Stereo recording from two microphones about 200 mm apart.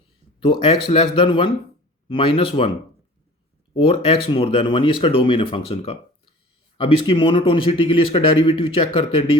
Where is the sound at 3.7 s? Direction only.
25° left (ahead or behind).